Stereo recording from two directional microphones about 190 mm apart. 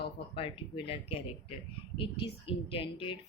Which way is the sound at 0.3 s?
30° left (ahead or behind).